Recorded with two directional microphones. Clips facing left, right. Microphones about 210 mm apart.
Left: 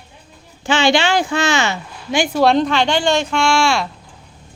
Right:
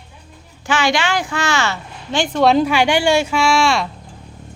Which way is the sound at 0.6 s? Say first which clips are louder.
Left 3 dB; 25° left (ahead or behind).